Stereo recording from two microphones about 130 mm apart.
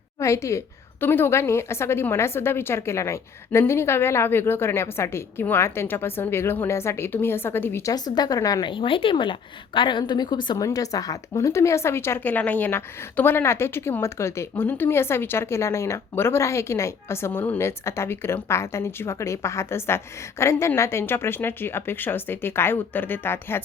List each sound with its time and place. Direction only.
0.2 s speech: 25° left (ahead or behind)
8.7 s a woman's voice: 40° left (ahead or behind); by 23.6 s 15° left (ahead or behind)